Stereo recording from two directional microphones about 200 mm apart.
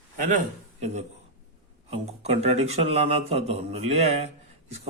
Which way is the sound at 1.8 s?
30° right (ahead or behind).